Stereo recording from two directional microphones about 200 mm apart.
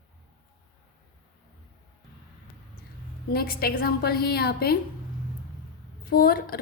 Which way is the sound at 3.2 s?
50° left (ahead or behind).